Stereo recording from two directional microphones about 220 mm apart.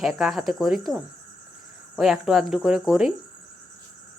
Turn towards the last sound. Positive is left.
turn(degrees=0)  # may be behind; listen again after turning